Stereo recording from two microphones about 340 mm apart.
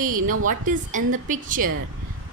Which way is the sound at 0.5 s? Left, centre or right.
Right.